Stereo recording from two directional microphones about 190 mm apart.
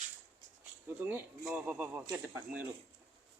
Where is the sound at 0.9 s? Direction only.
10° right (ahead or behind).